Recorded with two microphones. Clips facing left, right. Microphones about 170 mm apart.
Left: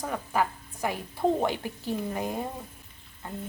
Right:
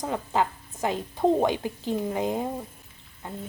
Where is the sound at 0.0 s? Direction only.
20° right (ahead or behind).